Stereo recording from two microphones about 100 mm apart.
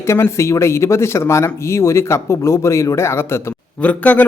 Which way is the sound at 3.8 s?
15° left (ahead or behind).